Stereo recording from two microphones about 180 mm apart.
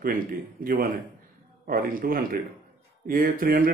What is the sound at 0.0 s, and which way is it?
A man's voice, 55° right (ahead or behind).